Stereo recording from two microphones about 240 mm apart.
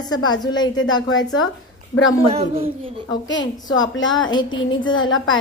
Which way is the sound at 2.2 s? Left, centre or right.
Right.